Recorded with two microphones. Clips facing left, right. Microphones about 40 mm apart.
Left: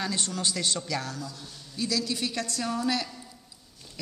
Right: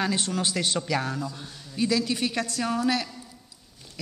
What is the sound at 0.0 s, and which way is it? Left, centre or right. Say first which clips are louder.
A woman's voice: right 4 dB; centre.